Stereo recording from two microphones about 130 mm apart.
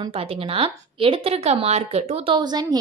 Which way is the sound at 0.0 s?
45° right (ahead or behind).